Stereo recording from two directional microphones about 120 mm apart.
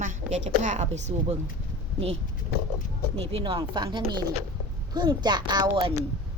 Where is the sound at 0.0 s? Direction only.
90° right.